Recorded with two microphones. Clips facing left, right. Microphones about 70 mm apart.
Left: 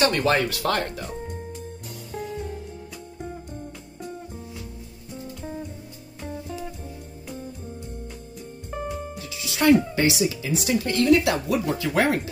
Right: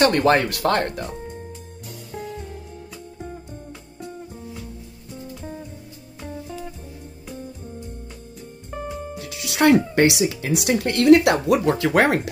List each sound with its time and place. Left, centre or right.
0.0 s speech: right
1.2 s music: centre
8.7 s music: centre
9.2 s music: right
9.9 s a woman's voice: right
11.4 s speech: right
11.9 s speech: right